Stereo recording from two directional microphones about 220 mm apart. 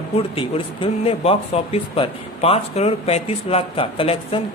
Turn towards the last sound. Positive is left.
turn(degrees=25)  # may be behind; listen again after turning